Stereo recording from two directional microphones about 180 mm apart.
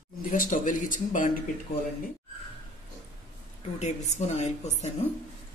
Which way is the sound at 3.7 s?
40° left (ahead or behind).